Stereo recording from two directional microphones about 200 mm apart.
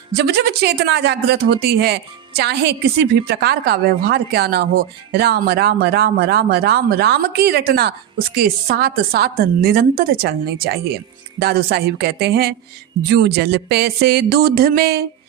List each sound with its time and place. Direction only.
0.2 s speech: 55° right (ahead or behind)